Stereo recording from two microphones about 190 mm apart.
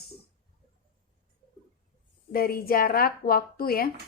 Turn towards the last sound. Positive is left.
turn(degrees=50)  # may be behind; listen again after turning